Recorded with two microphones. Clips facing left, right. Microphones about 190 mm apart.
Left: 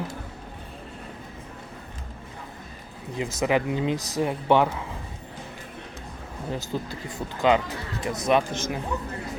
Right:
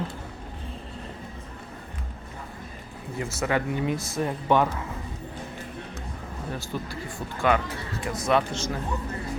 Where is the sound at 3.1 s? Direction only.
15° left (ahead or behind).